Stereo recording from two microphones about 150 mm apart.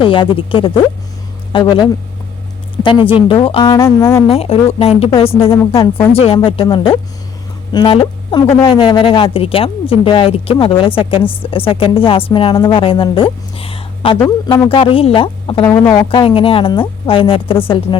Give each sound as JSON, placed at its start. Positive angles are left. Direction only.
{"t": 0.0, "sound": "speech", "side_deg": 35}
{"t": 3.7, "sound": "speech", "side_deg": 15}
{"t": 4.3, "sound": "speech", "side_deg": 40}
{"t": 5.7, "sound": "speech", "side_deg": 20}
{"t": 6.1, "sound": "speech", "side_deg": 40}
{"t": 14.4, "sound": "speech", "side_deg": 15}
{"t": 14.7, "sound": "speech", "side_deg": 35}
{"t": 15.6, "sound": "speech", "side_deg": 15}
{"t": 16.0, "sound": "speech", "side_deg": 35}